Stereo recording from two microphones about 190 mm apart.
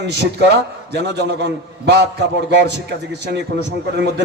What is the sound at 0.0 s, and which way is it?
Speech, 65° right (ahead or behind).